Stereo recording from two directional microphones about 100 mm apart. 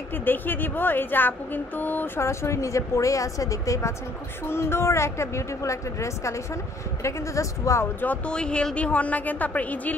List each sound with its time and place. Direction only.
0.1 s speech: 20° left (ahead or behind)
8.0 s a woman's voice: 15° left (ahead or behind)